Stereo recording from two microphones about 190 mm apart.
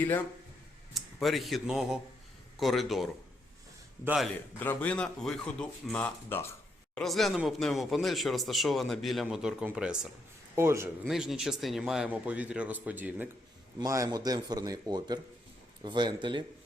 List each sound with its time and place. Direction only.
0.9 s speech: centre (ahead or behind)
4.6 s a man's voice: 10° left (ahead or behind); by 10.9 s 15° right (ahead or behind)
11.0 s a man's voice: centre (ahead or behind); by 16.4 s 25° right (ahead or behind)